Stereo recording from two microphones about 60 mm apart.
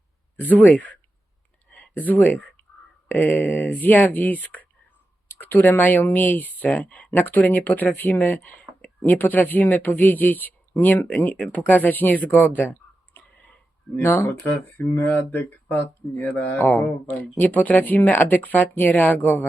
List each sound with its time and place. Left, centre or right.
0.3 s speech: left
1.7 s a sound: left
3.2 s speech: left
13.1 s a sound: left
14.0 s speech: left
14.9 s speech: left